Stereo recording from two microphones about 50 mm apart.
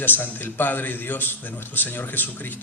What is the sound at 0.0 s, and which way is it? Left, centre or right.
Speech, left.